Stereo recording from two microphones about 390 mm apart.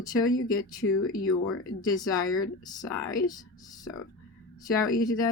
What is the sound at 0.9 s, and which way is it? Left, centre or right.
Speech, left.